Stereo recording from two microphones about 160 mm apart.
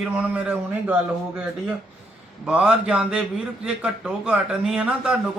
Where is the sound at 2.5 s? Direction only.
5° right (ahead or behind).